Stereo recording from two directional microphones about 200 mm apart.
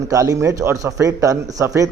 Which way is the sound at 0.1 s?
15° right (ahead or behind).